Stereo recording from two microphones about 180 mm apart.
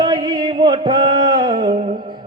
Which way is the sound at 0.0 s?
25° right (ahead or behind).